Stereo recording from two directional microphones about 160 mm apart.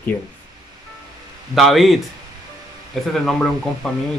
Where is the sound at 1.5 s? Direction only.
Centre (ahead or behind).